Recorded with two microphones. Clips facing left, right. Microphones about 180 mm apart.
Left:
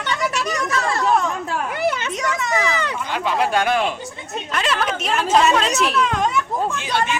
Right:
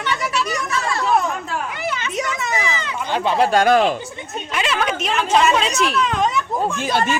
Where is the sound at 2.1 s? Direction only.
10° right (ahead or behind).